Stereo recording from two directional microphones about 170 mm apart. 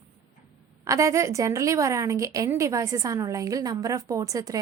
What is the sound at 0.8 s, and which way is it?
A woman's voice, 20° right (ahead or behind).